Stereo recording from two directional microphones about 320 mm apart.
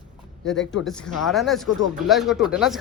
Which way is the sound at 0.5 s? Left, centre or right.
Left.